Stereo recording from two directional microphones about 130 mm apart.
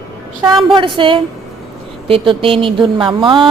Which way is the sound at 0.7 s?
40° right (ahead or behind).